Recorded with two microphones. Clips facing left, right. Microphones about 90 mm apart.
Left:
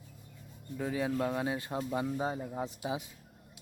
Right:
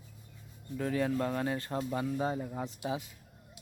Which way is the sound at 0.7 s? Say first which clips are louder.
Right 1 dB; 10° left (ahead or behind).